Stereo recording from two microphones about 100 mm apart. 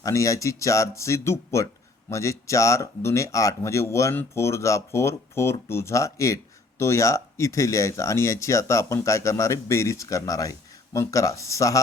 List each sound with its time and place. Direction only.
0.0 s speech: 35° left (ahead or behind)